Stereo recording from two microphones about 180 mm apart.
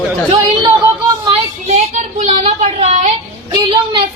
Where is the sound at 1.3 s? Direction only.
35° right (ahead or behind).